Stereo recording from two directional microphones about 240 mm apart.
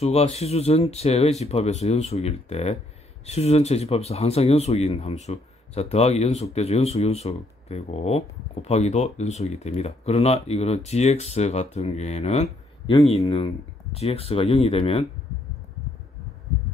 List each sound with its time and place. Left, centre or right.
0.0 s speech: left